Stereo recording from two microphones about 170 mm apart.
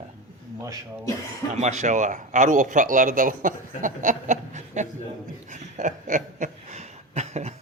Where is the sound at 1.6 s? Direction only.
45° right (ahead or behind).